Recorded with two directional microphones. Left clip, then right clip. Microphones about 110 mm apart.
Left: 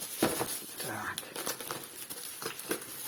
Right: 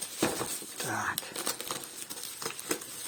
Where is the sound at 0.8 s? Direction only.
50° right (ahead or behind).